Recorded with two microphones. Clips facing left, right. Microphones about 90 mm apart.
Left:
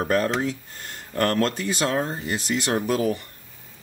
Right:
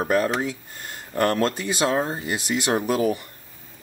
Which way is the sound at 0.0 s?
10° right (ahead or behind).